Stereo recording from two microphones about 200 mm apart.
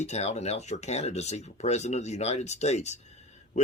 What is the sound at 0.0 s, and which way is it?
Speech, 35° left (ahead or behind).